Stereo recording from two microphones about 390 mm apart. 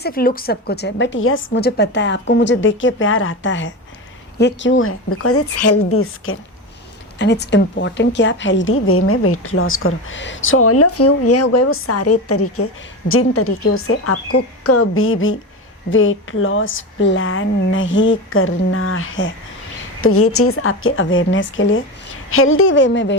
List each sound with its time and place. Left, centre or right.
0.0 s a woman's voice: left